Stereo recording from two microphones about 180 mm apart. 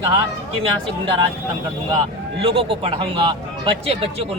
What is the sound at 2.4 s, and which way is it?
A man's voice, 30° right (ahead or behind).